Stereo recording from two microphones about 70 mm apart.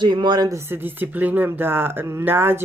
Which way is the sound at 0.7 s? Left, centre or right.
Right.